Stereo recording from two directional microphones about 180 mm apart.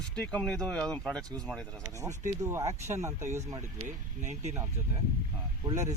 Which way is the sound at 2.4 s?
15° right (ahead or behind).